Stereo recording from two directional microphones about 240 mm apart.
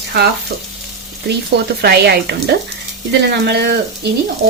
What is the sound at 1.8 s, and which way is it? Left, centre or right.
A woman's voice, right.